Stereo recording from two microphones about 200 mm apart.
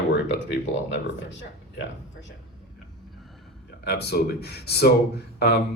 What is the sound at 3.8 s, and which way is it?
Speech, 55° left (ahead or behind).